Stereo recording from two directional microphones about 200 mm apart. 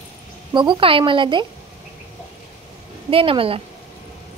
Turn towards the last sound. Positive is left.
turn(degrees=-25)  # may be behind; listen again after turning